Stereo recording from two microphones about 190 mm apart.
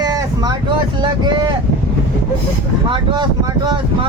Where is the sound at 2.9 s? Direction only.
25° right (ahead or behind).